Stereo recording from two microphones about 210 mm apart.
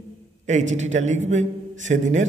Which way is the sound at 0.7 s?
35° right (ahead or behind).